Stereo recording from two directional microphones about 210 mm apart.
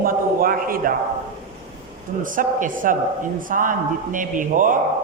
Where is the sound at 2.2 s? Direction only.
40° right (ahead or behind).